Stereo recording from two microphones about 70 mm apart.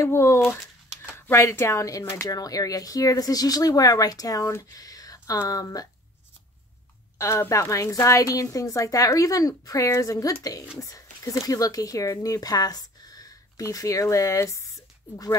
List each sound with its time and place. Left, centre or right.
0.0 s speech: left
4.7 s a sound: left
5.5 s speech: left
7.2 s a woman's voice: left
13.6 s a woman's voice: left